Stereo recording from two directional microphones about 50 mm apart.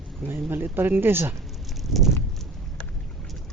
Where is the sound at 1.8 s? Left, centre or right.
Centre.